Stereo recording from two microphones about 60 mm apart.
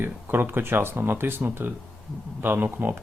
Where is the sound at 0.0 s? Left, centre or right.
Right.